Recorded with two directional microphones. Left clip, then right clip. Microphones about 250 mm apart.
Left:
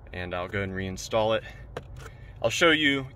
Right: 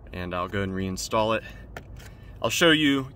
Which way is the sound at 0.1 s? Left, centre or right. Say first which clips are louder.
Right 2 dB; right.